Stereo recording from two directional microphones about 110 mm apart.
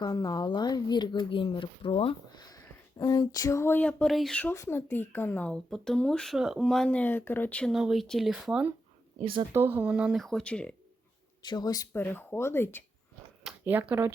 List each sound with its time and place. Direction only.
0.0 s speech: 35° left (ahead or behind); by 2.1 s 60° left (ahead or behind)
2.3 s speech: 35° left (ahead or behind); by 4.4 s 5° left (ahead or behind)
4.5 s speech: 25° left (ahead or behind)
5.7 s speech: 5° left (ahead or behind)
7.7 s speech: 5° right (ahead or behind)
9.2 s speech: 50° right (ahead or behind)
9.5 s speech: 20° right (ahead or behind); by 10.8 s 10° left (ahead or behind)
11.4 s speech: 40° left (ahead or behind)
11.9 s speech: 20° left (ahead or behind)
13.7 s speech: 20° right (ahead or behind)